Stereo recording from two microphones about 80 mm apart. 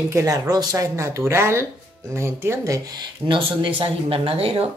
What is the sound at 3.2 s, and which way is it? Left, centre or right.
Speech, right.